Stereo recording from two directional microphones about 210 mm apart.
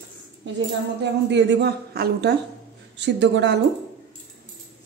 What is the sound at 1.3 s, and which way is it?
Speech, 55° right (ahead or behind).